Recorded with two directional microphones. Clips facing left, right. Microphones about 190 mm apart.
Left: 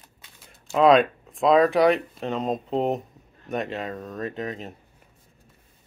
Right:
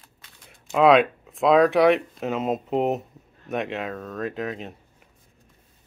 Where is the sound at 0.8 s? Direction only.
Centre (ahead or behind).